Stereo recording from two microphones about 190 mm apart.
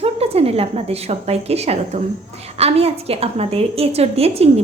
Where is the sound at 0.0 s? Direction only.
30° right (ahead or behind).